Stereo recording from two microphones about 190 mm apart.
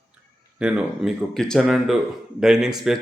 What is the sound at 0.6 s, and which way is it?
Speech, 5° right (ahead or behind).